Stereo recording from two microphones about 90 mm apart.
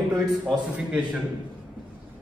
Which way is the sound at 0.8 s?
10° right (ahead or behind).